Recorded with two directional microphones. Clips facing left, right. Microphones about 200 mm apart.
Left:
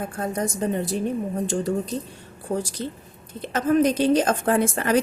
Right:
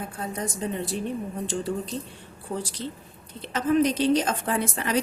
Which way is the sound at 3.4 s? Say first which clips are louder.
Left 3 dB; 45° left (ahead or behind).